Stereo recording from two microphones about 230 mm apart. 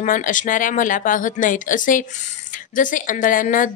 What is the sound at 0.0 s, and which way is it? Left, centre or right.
Speech, left.